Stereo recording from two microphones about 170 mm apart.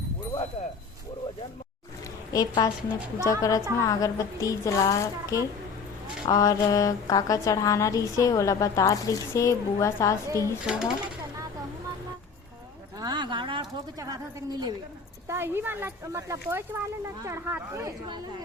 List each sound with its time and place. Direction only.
2.3 s speech: 20° left (ahead or behind)
10.2 s a child's voice: 20° right (ahead or behind)
10.6 s speech: 5° right (ahead or behind)
13.0 s a sound: 25° right (ahead or behind)
15.3 s speech: 15° right (ahead or behind)